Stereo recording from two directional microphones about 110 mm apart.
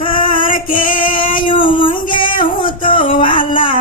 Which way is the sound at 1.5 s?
50° left (ahead or behind).